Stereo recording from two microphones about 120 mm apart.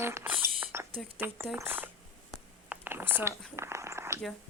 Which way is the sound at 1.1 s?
20° right (ahead or behind).